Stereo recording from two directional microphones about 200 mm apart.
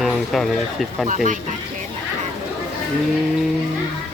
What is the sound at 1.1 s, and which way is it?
Speech, 40° right (ahead or behind).